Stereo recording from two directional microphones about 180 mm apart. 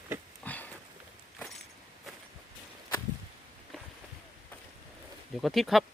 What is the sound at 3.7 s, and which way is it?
Boat, 5° left (ahead or behind).